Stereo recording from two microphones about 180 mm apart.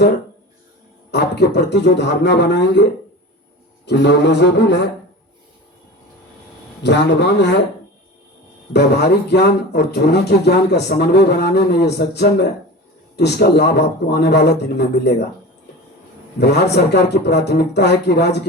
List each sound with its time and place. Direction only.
1.1 s speech: 65° left (ahead or behind)
6.8 s speech: 75° left (ahead or behind)
8.7 s speech: 65° left (ahead or behind)
16.4 s speech: 65° left (ahead or behind)